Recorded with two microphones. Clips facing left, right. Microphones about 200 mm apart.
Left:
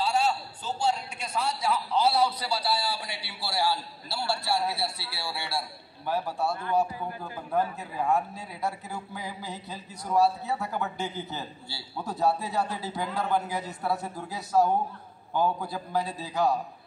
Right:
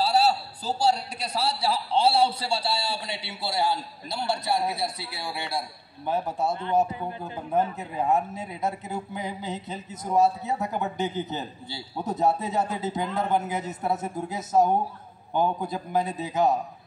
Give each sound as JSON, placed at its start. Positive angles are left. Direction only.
{"t": 0.0, "sound": "a man's voice", "side_deg": -35}